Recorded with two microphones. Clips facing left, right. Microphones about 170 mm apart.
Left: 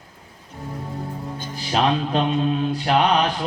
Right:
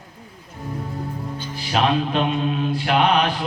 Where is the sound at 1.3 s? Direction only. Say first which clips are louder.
Even; 45° left (ahead or behind).